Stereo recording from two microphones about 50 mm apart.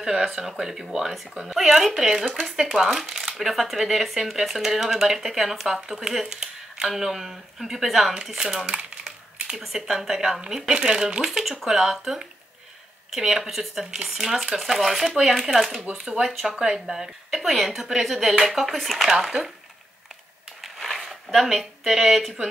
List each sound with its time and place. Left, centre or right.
0.0 s a woman's voice: centre
15.9 s a woman's voice: centre
20.6 s a sound: centre